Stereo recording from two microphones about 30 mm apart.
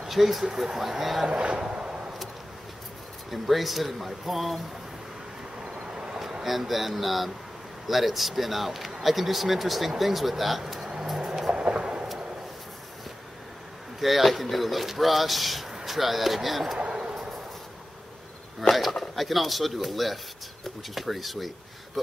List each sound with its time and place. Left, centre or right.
0.0 s speech: centre
1.4 s a sound: right
3.3 s speech: centre
6.4 s speech: centre
11.5 s vehicle: right
13.9 s speech: centre
19.1 s speech: centre